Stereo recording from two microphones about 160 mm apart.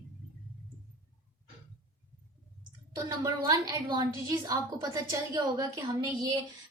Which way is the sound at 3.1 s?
20° right (ahead or behind).